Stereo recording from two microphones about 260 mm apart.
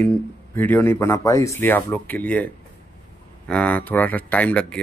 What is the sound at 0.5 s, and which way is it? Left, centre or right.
Speech, centre.